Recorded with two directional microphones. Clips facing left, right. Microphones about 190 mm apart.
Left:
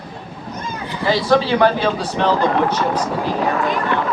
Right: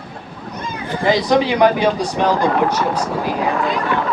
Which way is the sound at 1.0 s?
15° right (ahead or behind).